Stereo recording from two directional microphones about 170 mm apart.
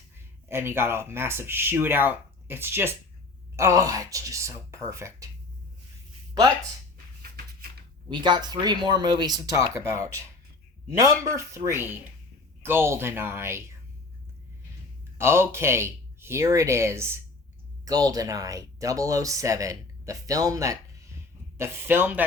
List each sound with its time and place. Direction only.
0.4 s speech: 15° right (ahead or behind)
7.2 s a sound: 60° right (ahead or behind)
8.1 s speech: 25° right (ahead or behind)
15.2 s speech: 15° right (ahead or behind)